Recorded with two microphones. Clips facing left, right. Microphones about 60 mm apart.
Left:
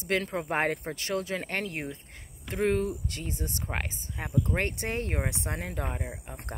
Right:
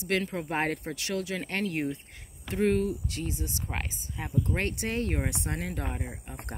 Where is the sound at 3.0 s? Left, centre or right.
Left.